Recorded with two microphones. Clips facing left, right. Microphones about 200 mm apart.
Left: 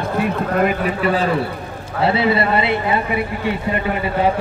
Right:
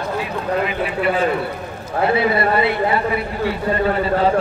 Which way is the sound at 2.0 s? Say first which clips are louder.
Left 1 dB; 25° left (ahead or behind).